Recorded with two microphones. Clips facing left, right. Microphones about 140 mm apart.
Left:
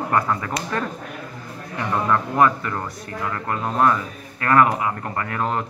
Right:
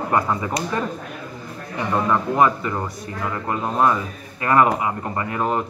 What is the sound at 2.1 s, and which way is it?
A man's voice, 15° right (ahead or behind).